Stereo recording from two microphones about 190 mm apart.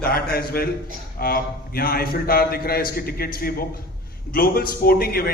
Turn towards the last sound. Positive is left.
turn(degrees=50)  # may be behind; listen again after turning